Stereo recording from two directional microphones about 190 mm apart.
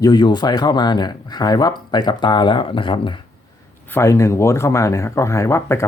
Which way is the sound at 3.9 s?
15° left (ahead or behind).